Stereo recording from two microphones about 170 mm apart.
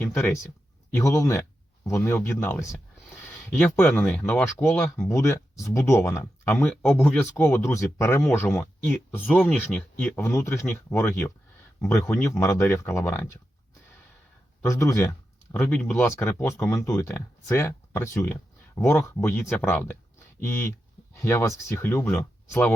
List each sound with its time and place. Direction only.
0.0 s speech: 15° left (ahead or behind)
14.6 s speech: 20° left (ahead or behind)